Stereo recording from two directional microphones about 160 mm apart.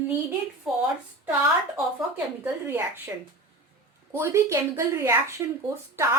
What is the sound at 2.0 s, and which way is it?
Speech, 10° right (ahead or behind).